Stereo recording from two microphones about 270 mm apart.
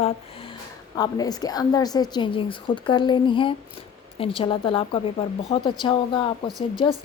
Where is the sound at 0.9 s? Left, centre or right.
Centre.